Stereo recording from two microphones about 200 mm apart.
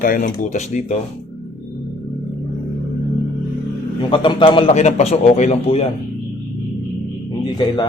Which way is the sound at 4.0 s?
25° left (ahead or behind).